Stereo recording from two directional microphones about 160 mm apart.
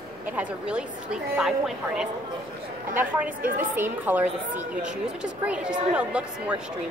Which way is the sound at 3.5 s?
10° right (ahead or behind).